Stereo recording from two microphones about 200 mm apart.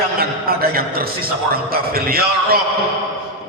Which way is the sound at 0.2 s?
50° right (ahead or behind).